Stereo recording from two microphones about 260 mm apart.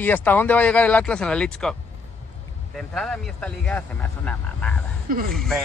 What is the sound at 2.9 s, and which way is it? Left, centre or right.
Speech, centre.